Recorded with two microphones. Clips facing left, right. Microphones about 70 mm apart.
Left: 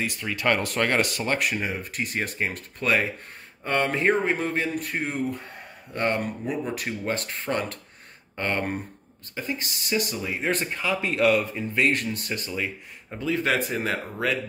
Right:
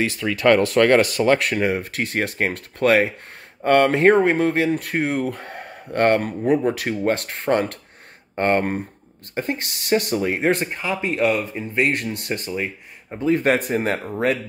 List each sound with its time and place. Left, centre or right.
0.0 s speech: right
10.6 s speech: right
11.9 s speech: right
12.4 s speech: right